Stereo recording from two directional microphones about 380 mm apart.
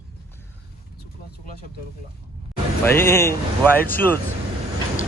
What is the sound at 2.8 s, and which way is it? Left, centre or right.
Speech, centre.